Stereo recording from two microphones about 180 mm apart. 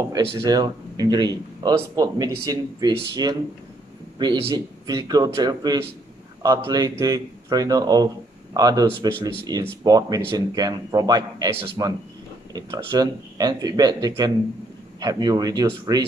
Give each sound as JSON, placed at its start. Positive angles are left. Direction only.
{"t": 0.0, "sound": "speech", "side_deg": -20}